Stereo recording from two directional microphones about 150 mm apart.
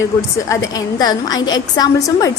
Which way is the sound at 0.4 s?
25° left (ahead or behind).